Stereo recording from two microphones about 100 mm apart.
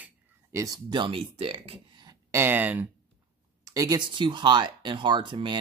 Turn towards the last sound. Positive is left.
turn(degrees=-50)  # may be behind; listen again after turning